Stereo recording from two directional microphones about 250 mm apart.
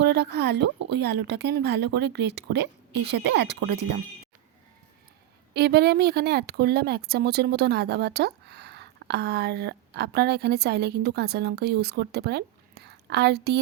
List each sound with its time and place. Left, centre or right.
0.1 s speech: right
5.5 s speech: right